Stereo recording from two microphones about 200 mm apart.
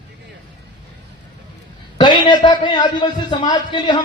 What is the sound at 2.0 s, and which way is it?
A man's voice, 25° left (ahead or behind).